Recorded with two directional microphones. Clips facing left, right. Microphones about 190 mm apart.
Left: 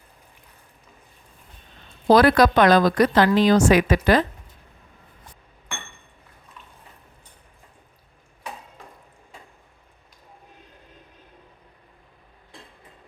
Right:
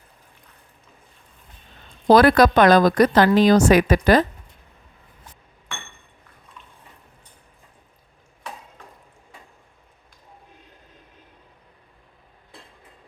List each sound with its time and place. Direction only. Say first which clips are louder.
2.0 s speech: right 2 dB; 50° right (ahead or behind)